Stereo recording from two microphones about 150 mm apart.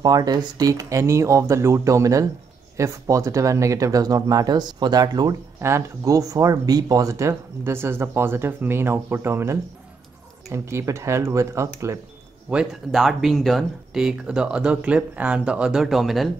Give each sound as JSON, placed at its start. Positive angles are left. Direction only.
{"t": 0.0, "sound": "speech", "side_deg": -25}
{"t": 12.4, "sound": "speech", "side_deg": -5}